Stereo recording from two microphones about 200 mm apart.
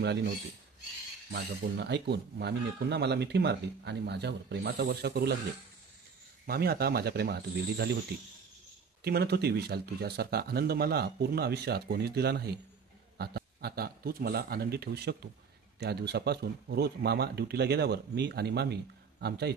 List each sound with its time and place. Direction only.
0.0 s speech: 55° right (ahead or behind)
1.3 s speech: 55° right (ahead or behind)
6.4 s speech: 50° right (ahead or behind)
9.0 s speech: 55° right (ahead or behind)